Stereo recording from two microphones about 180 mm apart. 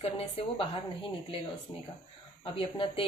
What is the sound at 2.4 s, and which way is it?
Speech, 30° left (ahead or behind).